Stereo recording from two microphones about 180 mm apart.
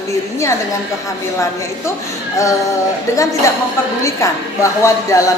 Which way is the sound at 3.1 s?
20° left (ahead or behind).